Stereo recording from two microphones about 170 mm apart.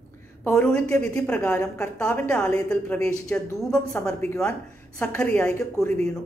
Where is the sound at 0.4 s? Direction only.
15° left (ahead or behind).